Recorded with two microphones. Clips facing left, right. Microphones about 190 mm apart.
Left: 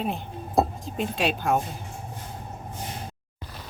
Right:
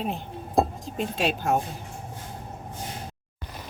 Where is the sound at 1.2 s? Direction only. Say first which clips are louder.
Even; 45° right (ahead or behind).